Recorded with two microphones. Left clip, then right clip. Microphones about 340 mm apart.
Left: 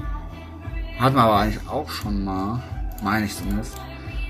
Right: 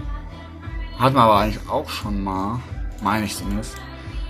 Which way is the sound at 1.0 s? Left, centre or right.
Centre.